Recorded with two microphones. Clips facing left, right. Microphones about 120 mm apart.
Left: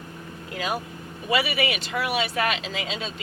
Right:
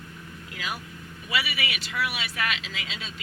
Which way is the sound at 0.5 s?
35° left (ahead or behind).